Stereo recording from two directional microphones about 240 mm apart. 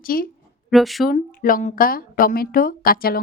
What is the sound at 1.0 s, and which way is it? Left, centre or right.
A woman's voice, left.